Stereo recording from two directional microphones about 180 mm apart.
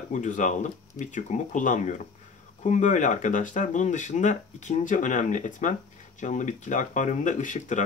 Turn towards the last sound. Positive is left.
turn(degrees=45)  # may be behind; listen again after turning